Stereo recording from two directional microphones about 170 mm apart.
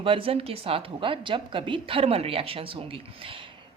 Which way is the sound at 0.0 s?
30° right (ahead or behind).